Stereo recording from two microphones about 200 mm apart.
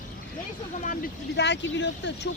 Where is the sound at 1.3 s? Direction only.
60° left (ahead or behind).